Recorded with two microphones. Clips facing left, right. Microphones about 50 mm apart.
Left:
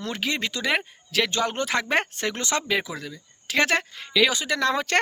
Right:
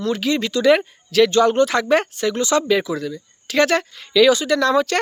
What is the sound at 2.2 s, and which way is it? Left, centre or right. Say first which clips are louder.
Speech: right 8 dB; left.